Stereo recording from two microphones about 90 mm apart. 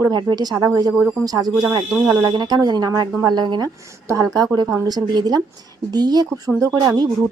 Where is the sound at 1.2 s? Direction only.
45° right (ahead or behind).